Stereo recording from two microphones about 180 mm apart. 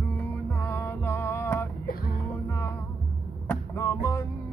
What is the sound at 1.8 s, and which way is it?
Music, 55° left (ahead or behind).